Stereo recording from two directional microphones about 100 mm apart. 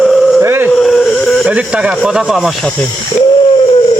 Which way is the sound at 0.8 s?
5° left (ahead or behind).